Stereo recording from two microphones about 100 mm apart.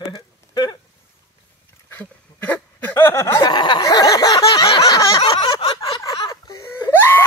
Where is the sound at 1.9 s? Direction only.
20° left (ahead or behind).